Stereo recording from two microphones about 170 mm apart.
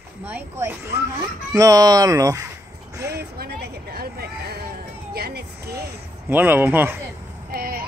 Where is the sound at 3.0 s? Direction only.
70° right (ahead or behind).